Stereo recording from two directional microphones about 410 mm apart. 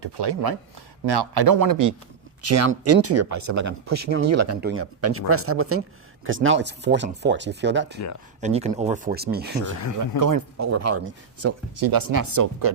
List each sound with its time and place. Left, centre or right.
0.0 s speech: right
1.5 s speech: right
2.4 s speech: right
10.2 s speech: right
11.8 s speech: right